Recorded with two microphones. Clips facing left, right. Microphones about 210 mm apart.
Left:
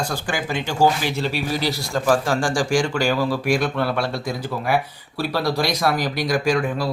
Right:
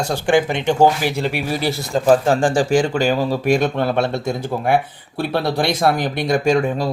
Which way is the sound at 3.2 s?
45° right (ahead or behind).